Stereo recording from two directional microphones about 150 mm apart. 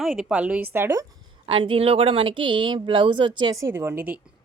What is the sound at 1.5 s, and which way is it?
A woman's voice, 35° right (ahead or behind).